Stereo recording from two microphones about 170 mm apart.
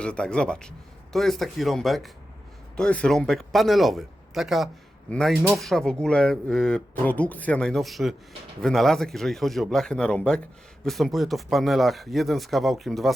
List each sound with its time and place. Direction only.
0.0 s speech: 5° left (ahead or behind)